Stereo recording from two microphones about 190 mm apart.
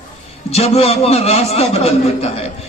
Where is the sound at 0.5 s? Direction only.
35° left (ahead or behind).